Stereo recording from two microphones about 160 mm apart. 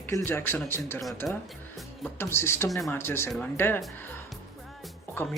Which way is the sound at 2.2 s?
15° left (ahead or behind).